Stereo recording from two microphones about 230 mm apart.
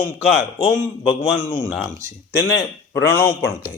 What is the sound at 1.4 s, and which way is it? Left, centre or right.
Speech, centre.